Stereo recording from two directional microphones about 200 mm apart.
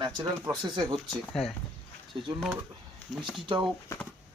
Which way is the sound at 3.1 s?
5° right (ahead or behind).